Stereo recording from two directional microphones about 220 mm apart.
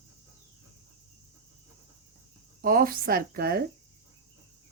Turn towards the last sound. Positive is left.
turn(degrees=-40)  # may be behind; listen again after turning